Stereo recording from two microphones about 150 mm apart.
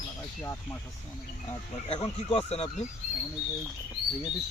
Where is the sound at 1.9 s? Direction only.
35° left (ahead or behind).